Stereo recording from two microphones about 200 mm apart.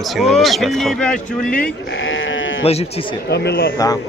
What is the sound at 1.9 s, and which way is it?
Sheep, 70° left (ahead or behind).